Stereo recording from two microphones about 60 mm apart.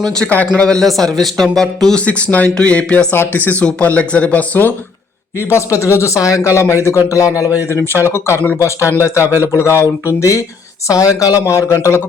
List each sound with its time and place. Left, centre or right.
0.0 s a man's voice: centre
2.0 s speech: centre
3.1 s speech: left
5.4 s speech: left
10.8 s speech: left
11.4 s speech: left